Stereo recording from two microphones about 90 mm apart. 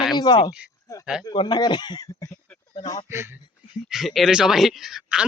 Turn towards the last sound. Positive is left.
turn(degrees=-5)  # may be behind; listen again after turning